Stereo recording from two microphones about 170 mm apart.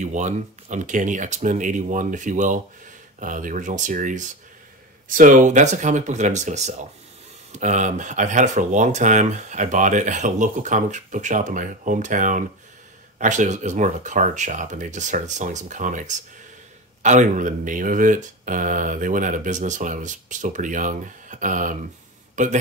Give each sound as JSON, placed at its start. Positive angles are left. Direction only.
{"t": 0.0, "sound": "speech", "side_deg": -45}